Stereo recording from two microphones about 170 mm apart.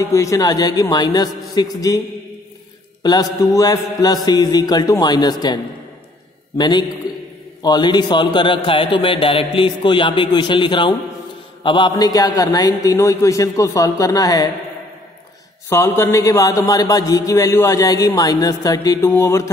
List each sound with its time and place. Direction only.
0.0 s a man's voice: 20° left (ahead or behind)
3.0 s a man's voice: 25° left (ahead or behind)
6.6 s a man's voice: 25° left (ahead or behind)
15.7 s a man's voice: 20° left (ahead or behind)